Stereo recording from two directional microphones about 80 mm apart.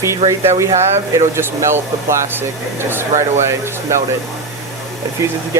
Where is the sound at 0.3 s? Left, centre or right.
Right.